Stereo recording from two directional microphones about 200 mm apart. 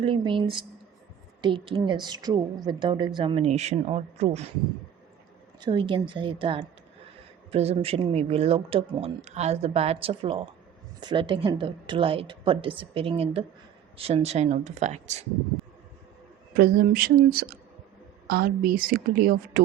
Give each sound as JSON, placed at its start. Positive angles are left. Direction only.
{"t": 0.0, "sound": "speech", "side_deg": -25}
{"t": 5.5, "sound": "speech", "side_deg": -25}
{"t": 16.6, "sound": "a woman's voice", "side_deg": -45}